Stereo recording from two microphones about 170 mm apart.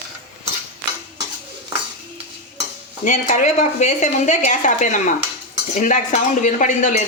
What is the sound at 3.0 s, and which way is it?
Speech, 45° left (ahead or behind).